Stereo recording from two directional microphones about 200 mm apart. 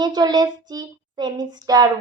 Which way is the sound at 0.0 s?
20° right (ahead or behind).